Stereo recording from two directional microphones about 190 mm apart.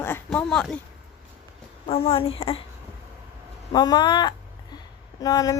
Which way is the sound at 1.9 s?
30° left (ahead or behind).